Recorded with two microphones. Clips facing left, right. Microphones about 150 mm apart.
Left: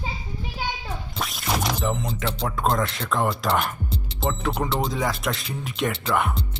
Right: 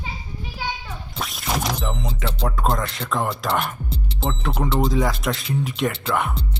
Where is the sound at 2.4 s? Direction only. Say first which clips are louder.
Even; centre (ahead or behind).